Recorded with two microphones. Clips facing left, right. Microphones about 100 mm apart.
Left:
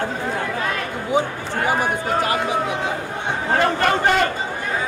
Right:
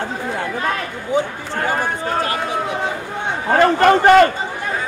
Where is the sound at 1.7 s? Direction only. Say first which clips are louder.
Even; 10° left (ahead or behind).